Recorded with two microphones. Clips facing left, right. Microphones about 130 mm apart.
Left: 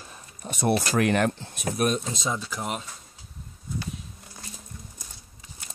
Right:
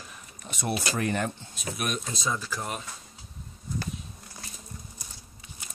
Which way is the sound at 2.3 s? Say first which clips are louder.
Left 2 dB; 15° left (ahead or behind).